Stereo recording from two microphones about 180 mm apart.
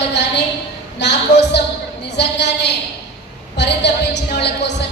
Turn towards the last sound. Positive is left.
turn(degrees=70)  # may be behind; listen again after turning